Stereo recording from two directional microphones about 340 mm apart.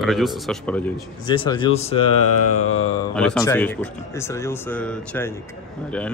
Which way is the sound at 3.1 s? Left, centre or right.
Centre.